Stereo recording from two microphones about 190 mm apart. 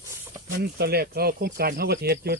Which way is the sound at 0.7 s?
55° right (ahead or behind).